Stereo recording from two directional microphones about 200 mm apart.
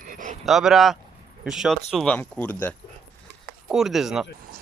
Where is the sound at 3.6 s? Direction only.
Centre (ahead or behind).